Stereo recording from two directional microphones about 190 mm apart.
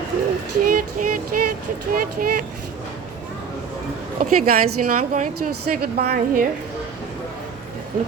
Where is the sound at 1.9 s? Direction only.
50° right (ahead or behind).